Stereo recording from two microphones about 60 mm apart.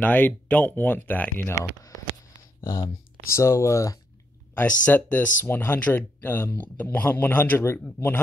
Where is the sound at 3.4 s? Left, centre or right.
Left.